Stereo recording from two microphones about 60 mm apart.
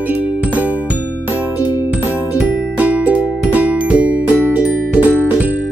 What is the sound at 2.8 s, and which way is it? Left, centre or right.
Music, right.